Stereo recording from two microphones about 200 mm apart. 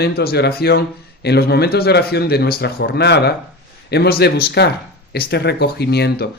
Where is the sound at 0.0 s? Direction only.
50° left (ahead or behind).